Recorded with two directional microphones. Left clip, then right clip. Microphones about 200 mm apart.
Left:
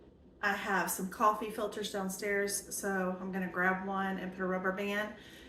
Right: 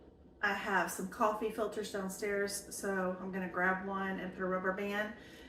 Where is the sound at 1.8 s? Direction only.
20° left (ahead or behind).